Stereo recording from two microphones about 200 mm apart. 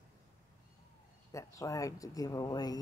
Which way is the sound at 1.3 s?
15° left (ahead or behind).